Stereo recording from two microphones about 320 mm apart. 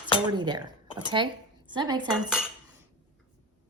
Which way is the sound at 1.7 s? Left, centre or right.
Centre.